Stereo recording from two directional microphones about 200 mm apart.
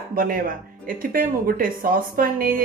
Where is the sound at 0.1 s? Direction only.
45° right (ahead or behind).